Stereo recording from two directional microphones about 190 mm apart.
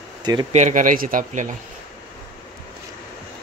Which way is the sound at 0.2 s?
20° right (ahead or behind).